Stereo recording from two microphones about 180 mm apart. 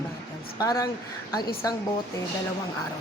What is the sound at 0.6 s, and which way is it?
Speech, 20° left (ahead or behind).